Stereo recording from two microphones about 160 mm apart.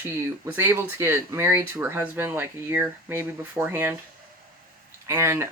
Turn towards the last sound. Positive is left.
turn(degrees=-15)  # may be behind; listen again after turning